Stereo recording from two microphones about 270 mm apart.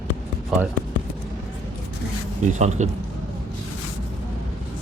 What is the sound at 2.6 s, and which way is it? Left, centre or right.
Speech, right.